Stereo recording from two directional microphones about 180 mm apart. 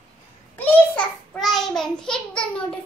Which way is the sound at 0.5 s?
10° left (ahead or behind).